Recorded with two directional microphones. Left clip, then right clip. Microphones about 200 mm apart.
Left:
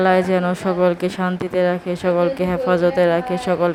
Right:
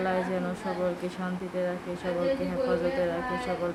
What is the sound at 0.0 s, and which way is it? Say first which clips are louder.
Speech: left 13 dB; 50° left (ahead or behind).